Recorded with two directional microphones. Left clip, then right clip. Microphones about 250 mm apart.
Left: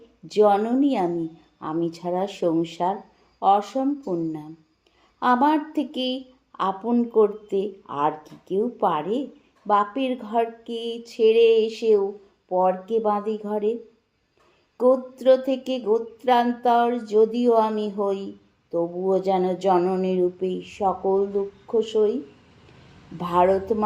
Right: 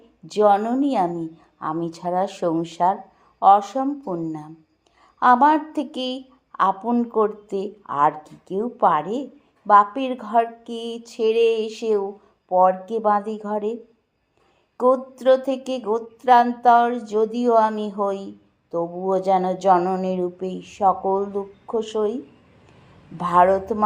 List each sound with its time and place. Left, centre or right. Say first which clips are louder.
0.3 s a woman's voice: right 1 dB; centre
14.8 s a woman's voice: right 1 dB; centre